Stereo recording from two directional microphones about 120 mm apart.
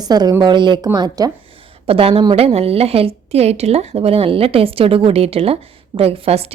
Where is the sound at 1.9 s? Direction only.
50° right (ahead or behind).